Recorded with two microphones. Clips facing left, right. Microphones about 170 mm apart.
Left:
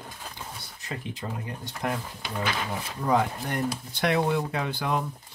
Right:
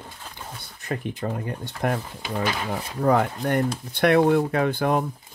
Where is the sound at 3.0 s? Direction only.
60° right (ahead or behind).